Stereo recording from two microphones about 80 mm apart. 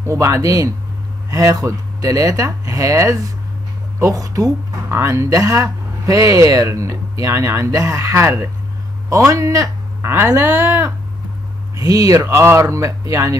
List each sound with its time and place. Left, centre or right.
0.0 s speech: right
4.8 s speech: right
9.3 s speech: right